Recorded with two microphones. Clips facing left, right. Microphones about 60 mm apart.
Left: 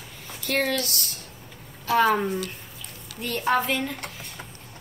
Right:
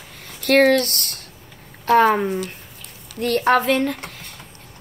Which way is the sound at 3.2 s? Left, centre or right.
Right.